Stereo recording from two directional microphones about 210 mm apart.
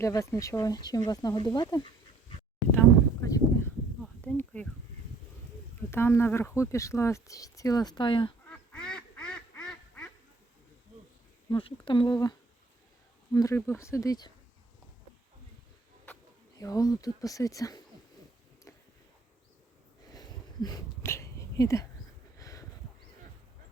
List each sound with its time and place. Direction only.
0.0 s speech: 15° left (ahead or behind)
2.7 s a sound: 15° left (ahead or behind)
5.9 s speech: 10° left (ahead or behind)
8.4 s duck: 5° left (ahead or behind)
11.5 s speech: 25° left (ahead or behind)
13.3 s speech: 15° left (ahead or behind)
16.6 s speech: 15° left (ahead or behind)
20.1 s a sound: 20° left (ahead or behind)